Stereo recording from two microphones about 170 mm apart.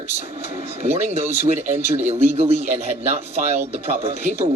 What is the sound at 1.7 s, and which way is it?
A man's voice, 40° right (ahead or behind).